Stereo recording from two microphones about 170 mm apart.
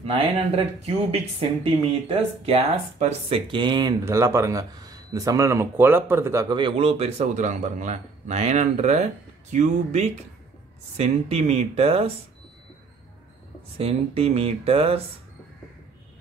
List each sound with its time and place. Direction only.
0.8 s speech: 35° right (ahead or behind)
4.0 s speech: 15° right (ahead or behind)
6.5 s a man's voice: 30° right (ahead or behind)
13.7 s speech: 35° right (ahead or behind)